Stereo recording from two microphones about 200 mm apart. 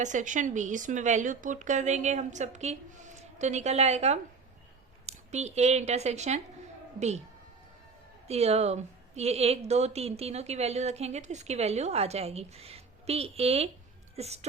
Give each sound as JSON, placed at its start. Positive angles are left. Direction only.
{"t": 0.0, "sound": "a woman's voice", "side_deg": -40}
{"t": 8.3, "sound": "a woman's voice", "side_deg": -30}